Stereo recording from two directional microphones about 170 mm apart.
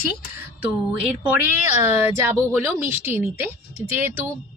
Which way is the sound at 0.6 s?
10° right (ahead or behind).